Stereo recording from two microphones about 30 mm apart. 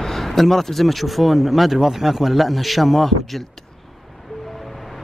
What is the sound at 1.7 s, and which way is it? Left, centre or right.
Speech, centre.